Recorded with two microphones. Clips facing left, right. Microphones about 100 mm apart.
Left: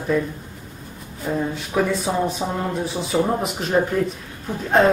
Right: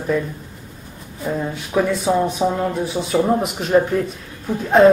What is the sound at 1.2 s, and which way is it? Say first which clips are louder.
Speech: even; 5° right (ahead or behind).